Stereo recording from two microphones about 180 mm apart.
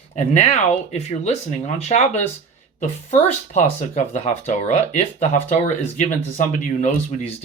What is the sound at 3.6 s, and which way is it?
Speech, 40° left (ahead or behind).